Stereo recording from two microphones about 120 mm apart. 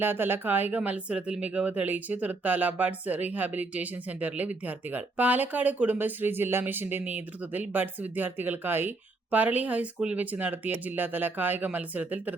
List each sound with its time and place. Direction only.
0.0 s speech: 15° right (ahead or behind)